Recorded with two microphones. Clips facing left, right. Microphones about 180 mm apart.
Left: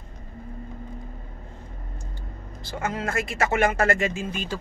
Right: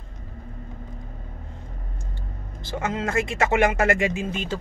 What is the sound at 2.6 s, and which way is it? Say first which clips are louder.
Speech: right 2 dB; 20° right (ahead or behind).